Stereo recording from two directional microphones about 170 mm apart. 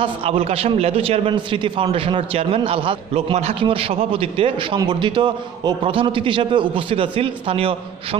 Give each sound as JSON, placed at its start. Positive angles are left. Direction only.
{"t": 0.0, "sound": "a man's voice", "side_deg": -35}